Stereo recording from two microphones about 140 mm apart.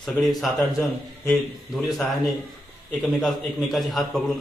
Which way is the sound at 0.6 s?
20° left (ahead or behind).